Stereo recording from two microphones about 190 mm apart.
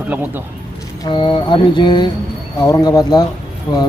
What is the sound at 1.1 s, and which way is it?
Speech, 25° left (ahead or behind).